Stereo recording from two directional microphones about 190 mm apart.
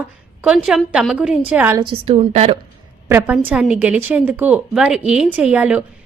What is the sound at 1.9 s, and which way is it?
Speech, 30° right (ahead or behind).